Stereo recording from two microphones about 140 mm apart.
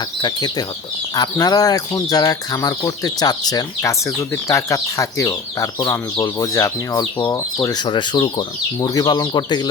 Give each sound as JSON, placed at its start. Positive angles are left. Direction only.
{"t": 0.2, "sound": "speech", "side_deg": 30}